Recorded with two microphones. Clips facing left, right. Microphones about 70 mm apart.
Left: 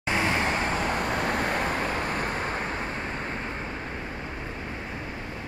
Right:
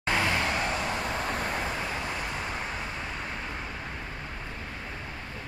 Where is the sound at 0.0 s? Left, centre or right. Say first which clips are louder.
Left 2 dB; left.